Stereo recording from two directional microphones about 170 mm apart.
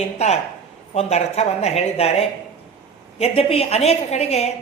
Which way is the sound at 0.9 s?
40° left (ahead or behind).